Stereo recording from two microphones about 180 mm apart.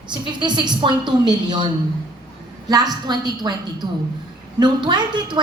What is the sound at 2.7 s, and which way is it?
A woman's voice, 20° right (ahead or behind).